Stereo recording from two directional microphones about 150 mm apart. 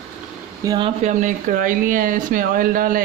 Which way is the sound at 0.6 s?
25° right (ahead or behind).